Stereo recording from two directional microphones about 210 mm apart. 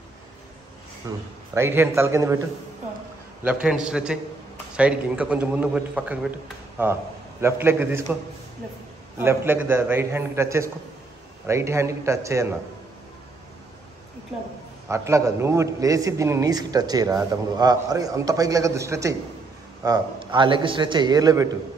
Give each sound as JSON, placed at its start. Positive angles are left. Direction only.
{"t": 1.0, "sound": "a man's voice", "side_deg": -10}
{"t": 3.4, "sound": "a man's voice", "side_deg": -5}
{"t": 9.2, "sound": "a man's voice", "side_deg": -10}
{"t": 14.9, "sound": "a man's voice", "side_deg": -15}